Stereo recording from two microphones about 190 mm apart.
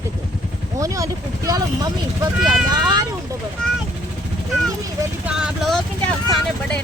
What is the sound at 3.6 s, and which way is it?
Speech, 5° left (ahead or behind).